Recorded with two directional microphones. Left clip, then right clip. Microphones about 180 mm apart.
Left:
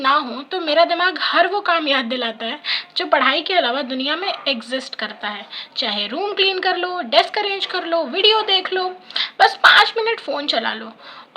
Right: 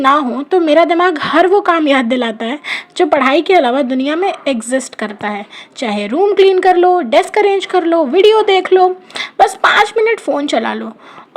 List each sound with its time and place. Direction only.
0.0 s speech: 45° right (ahead or behind)